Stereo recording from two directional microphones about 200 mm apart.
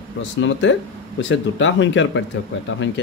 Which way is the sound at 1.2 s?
65° left (ahead or behind).